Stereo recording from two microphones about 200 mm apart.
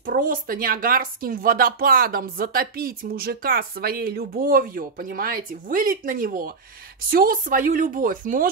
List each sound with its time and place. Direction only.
0.0 s a woman's voice: 45° right (ahead or behind)